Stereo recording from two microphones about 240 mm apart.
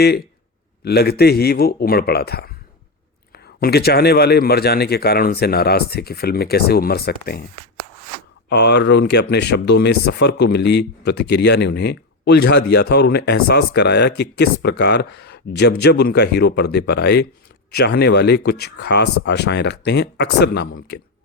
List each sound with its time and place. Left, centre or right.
0.9 s a man's voice: left
8.4 s speech: left